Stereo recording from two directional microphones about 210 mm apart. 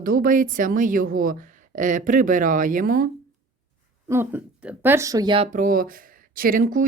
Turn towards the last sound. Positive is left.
turn(degrees=-40)  # may be behind; listen again after turning